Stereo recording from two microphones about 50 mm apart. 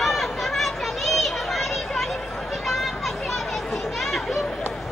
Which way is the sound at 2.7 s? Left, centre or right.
Centre.